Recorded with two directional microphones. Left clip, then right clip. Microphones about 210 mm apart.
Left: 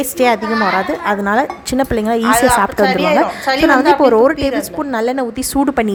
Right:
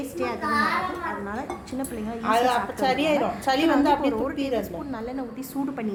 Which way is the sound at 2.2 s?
Centre (ahead or behind).